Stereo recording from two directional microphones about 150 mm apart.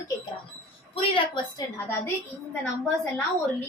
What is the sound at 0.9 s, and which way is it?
Speech, 35° left (ahead or behind).